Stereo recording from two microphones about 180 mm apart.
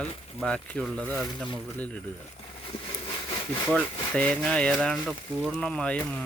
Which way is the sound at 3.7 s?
5° left (ahead or behind).